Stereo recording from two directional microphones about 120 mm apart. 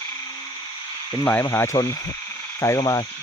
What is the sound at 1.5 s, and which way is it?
Speech, 25° left (ahead or behind).